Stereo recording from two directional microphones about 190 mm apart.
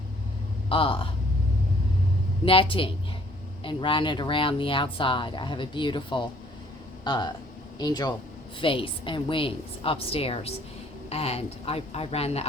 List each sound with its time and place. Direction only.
0.7 s speech: 30° left (ahead or behind)
2.4 s speech: 30° left (ahead or behind)